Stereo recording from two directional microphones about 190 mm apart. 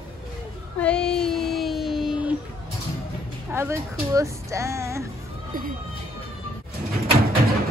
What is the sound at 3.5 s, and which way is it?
Speech, 15° right (ahead or behind).